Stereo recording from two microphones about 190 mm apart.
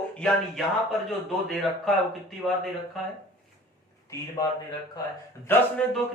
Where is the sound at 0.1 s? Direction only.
5° left (ahead or behind).